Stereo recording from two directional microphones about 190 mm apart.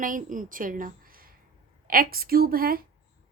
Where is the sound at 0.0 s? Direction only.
45° right (ahead or behind).